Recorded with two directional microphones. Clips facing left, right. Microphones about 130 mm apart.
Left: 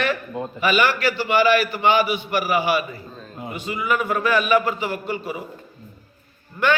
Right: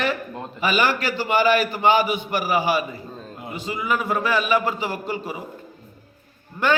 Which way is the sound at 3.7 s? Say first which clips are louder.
Left 1 dB; 30° right (ahead or behind).